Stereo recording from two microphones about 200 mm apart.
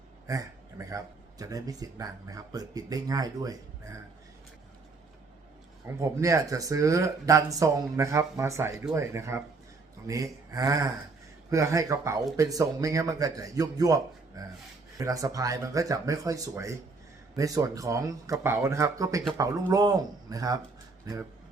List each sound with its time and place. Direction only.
0.3 s speech: 15° right (ahead or behind)
6.0 s speech: 15° right (ahead or behind)